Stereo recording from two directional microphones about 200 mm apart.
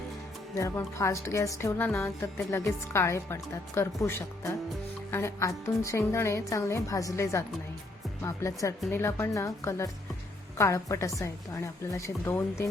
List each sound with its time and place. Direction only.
0.5 s a woman's voice: 15° left (ahead or behind)
5.1 s a woman's voice: 15° left (ahead or behind)